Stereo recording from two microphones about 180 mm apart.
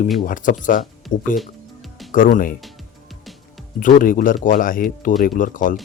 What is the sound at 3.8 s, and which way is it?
Speech, 50° left (ahead or behind).